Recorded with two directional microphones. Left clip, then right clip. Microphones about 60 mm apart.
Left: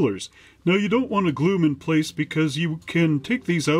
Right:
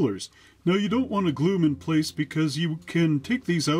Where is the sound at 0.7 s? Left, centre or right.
Right.